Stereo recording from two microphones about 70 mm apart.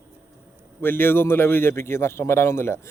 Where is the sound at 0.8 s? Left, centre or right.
Left.